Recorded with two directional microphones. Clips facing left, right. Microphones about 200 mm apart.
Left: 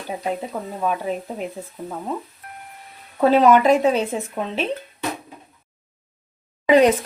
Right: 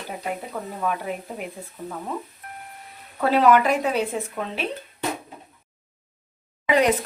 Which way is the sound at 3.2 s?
20° left (ahead or behind).